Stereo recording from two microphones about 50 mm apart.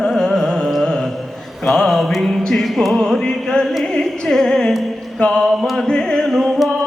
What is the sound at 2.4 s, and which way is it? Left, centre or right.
Music, centre.